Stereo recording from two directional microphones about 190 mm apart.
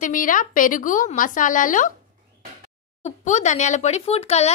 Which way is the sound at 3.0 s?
40° left (ahead or behind).